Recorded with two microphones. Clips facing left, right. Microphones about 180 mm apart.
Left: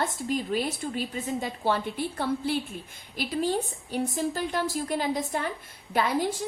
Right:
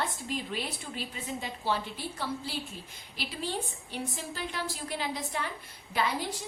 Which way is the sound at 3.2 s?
45° left (ahead or behind).